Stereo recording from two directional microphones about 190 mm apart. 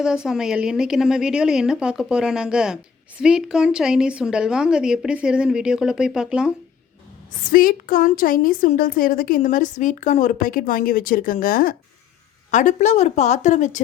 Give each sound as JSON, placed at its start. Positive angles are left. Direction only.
{"t": 0.0, "sound": "a woman's voice", "side_deg": -5}
{"t": 7.5, "sound": "a woman's voice", "side_deg": 50}